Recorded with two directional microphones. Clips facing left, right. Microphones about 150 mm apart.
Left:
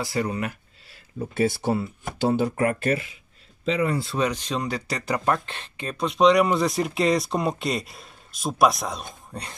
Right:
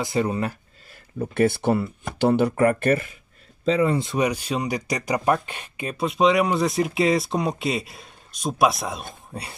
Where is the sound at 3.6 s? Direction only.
35° right (ahead or behind).